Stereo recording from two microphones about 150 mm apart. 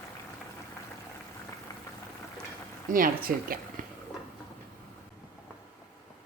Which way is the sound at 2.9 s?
70° right (ahead or behind).